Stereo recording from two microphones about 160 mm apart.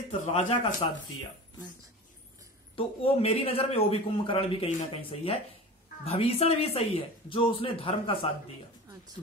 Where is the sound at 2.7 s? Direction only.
35° left (ahead or behind).